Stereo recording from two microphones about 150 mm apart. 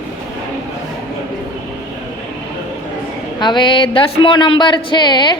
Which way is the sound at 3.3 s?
30° left (ahead or behind).